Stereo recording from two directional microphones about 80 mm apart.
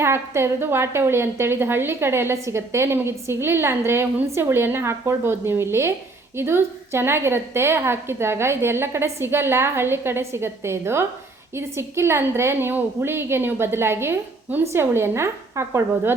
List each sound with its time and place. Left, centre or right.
0.0 s a woman's voice: right